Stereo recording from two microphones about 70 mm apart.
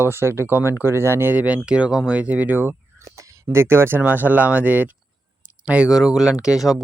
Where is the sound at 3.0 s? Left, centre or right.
Right.